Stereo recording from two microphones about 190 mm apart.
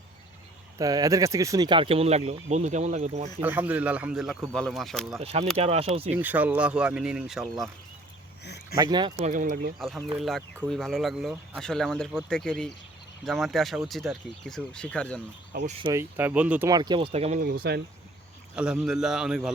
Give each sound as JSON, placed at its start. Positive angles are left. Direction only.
{"t": 0.8, "sound": "speech", "side_deg": -20}
{"t": 3.4, "sound": "speech", "side_deg": -10}
{"t": 5.2, "sound": "speech", "side_deg": -30}
{"t": 6.1, "sound": "speech", "side_deg": -10}
{"t": 8.7, "sound": "speech", "side_deg": -20}
{"t": 9.1, "sound": "speech", "side_deg": -40}
{"t": 9.7, "sound": "speech", "side_deg": 0}
{"t": 15.8, "sound": "speech", "side_deg": -15}
{"t": 16.6, "sound": "speech", "side_deg": -20}
{"t": 17.4, "sound": "speech", "side_deg": -55}
{"t": 18.5, "sound": "speech", "side_deg": -5}